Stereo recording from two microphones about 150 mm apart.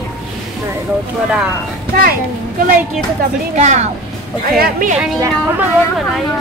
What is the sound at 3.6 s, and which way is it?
Speech, 50° right (ahead or behind).